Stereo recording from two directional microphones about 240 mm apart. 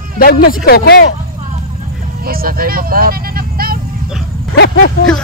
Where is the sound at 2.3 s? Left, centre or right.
Right.